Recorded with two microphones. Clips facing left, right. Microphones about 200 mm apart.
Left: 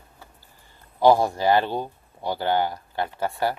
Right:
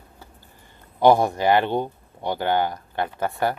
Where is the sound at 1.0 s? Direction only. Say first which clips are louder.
Right 1 dB; 20° right (ahead or behind).